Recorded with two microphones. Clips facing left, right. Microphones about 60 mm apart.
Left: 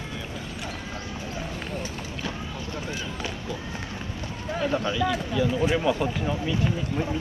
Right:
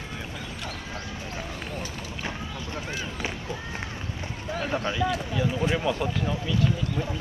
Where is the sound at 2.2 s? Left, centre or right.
Right.